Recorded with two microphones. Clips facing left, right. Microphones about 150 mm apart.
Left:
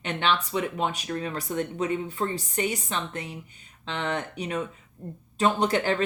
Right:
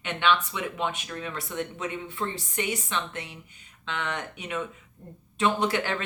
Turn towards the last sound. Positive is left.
turn(degrees=35)  # may be behind; listen again after turning